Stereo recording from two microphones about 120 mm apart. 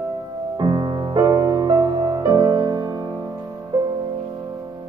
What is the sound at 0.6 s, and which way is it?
Music, 40° right (ahead or behind).